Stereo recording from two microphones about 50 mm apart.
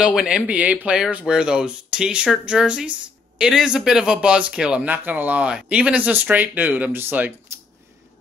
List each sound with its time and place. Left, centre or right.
0.0 s speech: centre
0.5 s speech: right
1.2 s speech: centre
4.8 s speech: right
6.9 s speech: right